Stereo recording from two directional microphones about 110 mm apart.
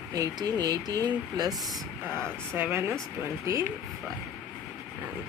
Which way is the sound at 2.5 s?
20° right (ahead or behind).